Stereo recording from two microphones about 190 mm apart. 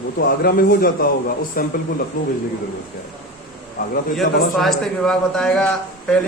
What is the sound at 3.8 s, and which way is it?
Speech, 50° left (ahead or behind).